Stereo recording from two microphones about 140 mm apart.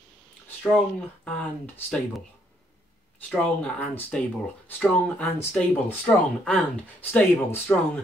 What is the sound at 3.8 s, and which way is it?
Speech, 10° left (ahead or behind).